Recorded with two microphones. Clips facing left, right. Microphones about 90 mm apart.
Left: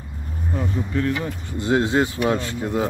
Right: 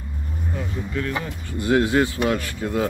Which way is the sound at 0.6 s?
30° left (ahead or behind).